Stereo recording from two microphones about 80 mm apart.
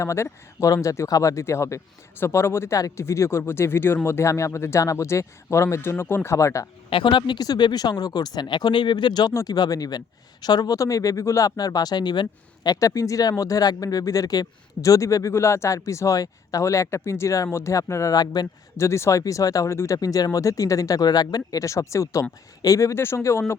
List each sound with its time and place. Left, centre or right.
0.0 s speech: left
6.9 s speech: left
9.3 s speech: left
18.1 s speech: left
18.8 s speech: left
20.0 s speech: left